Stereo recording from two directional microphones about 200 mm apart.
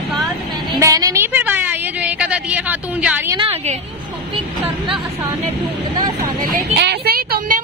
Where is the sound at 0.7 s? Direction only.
15° right (ahead or behind).